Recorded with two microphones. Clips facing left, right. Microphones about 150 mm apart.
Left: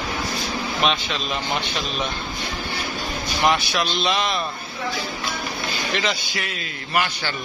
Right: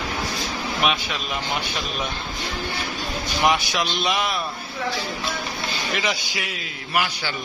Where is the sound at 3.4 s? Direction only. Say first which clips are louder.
Left 1 dB; 15° right (ahead or behind).